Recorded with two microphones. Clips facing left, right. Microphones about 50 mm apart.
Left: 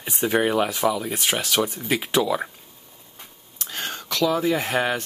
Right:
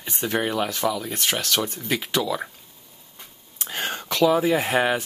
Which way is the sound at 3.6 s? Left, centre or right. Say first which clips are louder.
Right 3 dB; centre.